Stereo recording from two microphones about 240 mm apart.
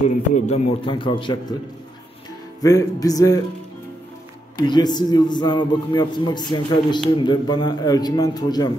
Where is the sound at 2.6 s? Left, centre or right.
Centre.